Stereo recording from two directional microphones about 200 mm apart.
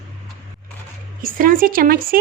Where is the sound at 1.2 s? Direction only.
45° right (ahead or behind).